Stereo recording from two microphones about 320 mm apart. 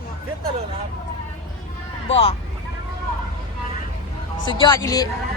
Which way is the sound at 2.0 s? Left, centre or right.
Centre.